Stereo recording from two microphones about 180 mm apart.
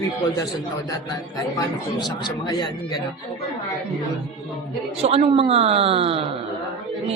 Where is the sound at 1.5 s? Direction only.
25° left (ahead or behind).